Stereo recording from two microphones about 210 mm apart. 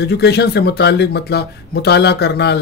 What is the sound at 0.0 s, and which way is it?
Speech, 50° left (ahead or behind).